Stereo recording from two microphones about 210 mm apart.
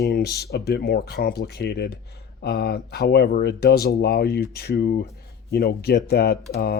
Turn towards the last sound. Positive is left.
turn(degrees=50)  # may be behind; listen again after turning